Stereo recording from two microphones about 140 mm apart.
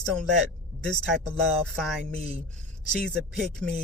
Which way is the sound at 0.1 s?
5° left (ahead or behind).